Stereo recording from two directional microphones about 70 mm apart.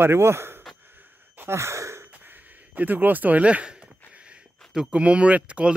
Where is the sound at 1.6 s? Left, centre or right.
Right.